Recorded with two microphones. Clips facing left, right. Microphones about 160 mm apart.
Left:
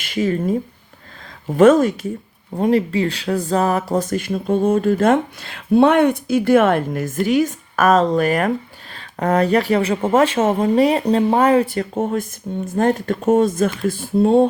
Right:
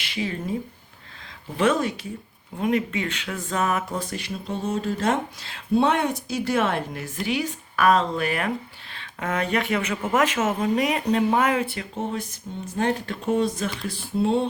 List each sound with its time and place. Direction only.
0.0 s speech: 45° left (ahead or behind)
1.5 s speech: 45° left (ahead or behind)
2.6 s speech: 35° left (ahead or behind); by 14.4 s 50° left (ahead or behind)